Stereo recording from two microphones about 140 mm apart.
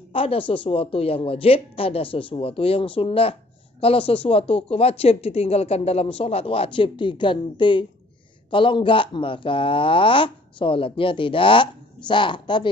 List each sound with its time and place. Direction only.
0.1 s speech: 40° left (ahead or behind)